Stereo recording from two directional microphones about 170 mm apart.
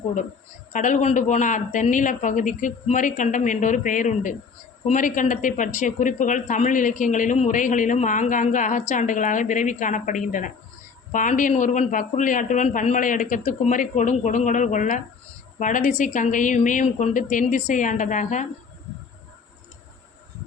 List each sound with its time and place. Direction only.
0.7 s speech: 50° left (ahead or behind)